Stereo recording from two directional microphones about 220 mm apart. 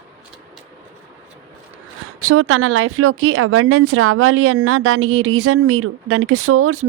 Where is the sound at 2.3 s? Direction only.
70° right (ahead or behind).